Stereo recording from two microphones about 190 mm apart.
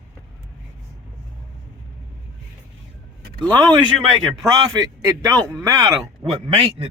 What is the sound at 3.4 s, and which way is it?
A man's voice, 20° right (ahead or behind).